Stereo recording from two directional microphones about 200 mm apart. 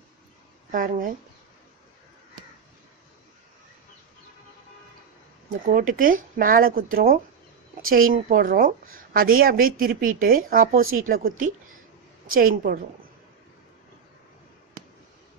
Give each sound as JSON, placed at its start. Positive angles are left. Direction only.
{"t": 0.7, "sound": "speech", "side_deg": -40}
{"t": 5.7, "sound": "a woman's voice", "side_deg": -45}